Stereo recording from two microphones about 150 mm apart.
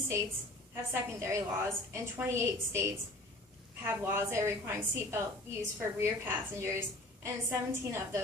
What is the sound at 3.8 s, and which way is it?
A woman's voice, 15° right (ahead or behind).